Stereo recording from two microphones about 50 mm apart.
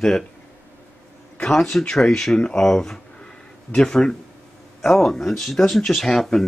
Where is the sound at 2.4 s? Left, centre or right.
Left.